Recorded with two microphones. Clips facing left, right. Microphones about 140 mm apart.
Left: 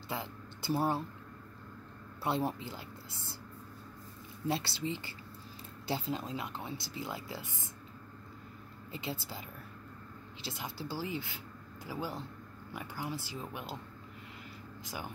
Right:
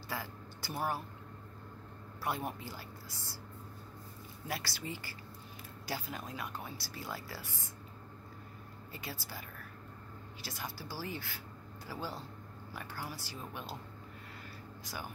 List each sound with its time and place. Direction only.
0.1 s speech: 20° left (ahead or behind)
2.2 s speech: 25° left (ahead or behind)
4.5 s speech: 25° left (ahead or behind)
8.9 s speech: 20° left (ahead or behind)
10.4 s a woman's voice: 20° left (ahead or behind)